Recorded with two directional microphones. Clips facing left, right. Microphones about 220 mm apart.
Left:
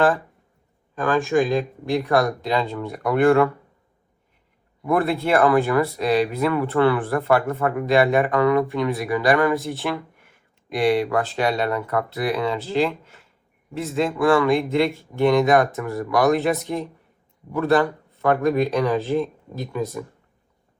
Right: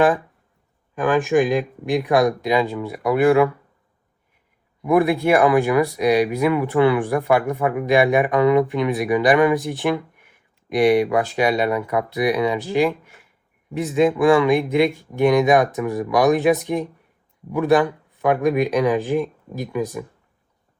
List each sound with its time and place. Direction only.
0.9 s speech: 15° right (ahead or behind)
4.8 s speech: 15° right (ahead or behind)